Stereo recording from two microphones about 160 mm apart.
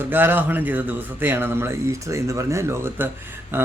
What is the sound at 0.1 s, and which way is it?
Speech, 15° right (ahead or behind).